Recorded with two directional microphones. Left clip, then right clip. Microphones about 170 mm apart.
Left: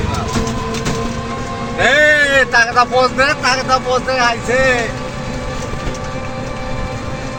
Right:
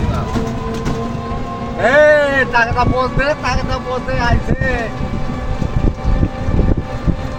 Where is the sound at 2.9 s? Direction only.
5° right (ahead or behind).